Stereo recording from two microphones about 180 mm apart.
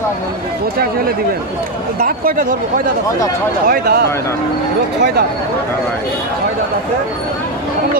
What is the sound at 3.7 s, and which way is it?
Speech, 60° right (ahead or behind).